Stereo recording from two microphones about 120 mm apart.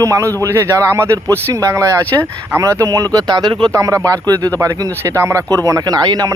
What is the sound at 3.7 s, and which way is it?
Speech, 25° right (ahead or behind).